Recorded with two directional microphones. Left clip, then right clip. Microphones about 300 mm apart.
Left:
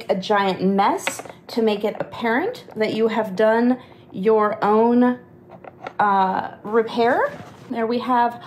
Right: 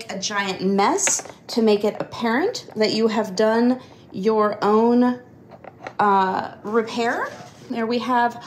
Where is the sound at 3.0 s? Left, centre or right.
Centre.